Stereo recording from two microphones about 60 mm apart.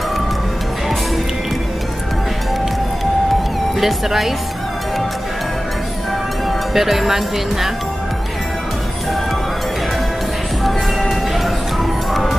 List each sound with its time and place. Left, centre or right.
3.8 s speech: centre
6.7 s speech: centre
10.6 s music: centre